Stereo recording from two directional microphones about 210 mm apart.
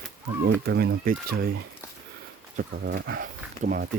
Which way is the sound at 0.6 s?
50° right (ahead or behind).